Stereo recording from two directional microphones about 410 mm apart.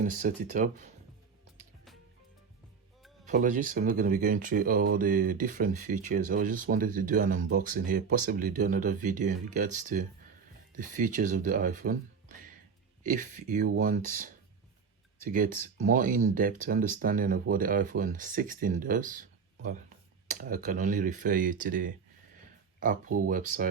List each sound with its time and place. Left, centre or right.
0.0 s speech: centre
3.2 s speech: centre
13.0 s speech: centre